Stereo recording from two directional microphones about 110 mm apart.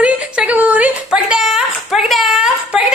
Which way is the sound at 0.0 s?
10° right (ahead or behind).